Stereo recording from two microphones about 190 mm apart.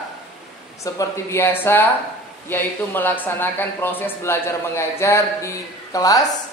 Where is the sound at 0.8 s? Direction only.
15° left (ahead or behind).